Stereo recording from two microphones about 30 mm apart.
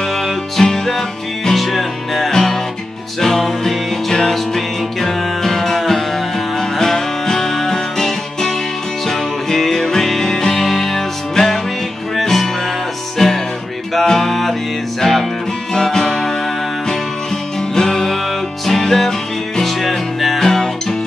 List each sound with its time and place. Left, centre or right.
0.6 s music: centre
1.5 s music: centre
2.3 s music: centre
15.7 s music: centre
17.7 s music: centre
20.3 s music: centre